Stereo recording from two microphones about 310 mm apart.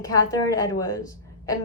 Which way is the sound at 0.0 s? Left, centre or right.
Centre.